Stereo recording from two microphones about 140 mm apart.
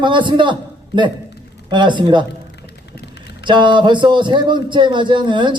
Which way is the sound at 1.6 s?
35° right (ahead or behind).